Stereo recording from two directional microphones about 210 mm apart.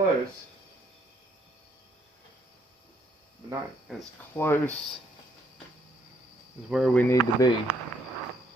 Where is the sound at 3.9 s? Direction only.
Centre (ahead or behind).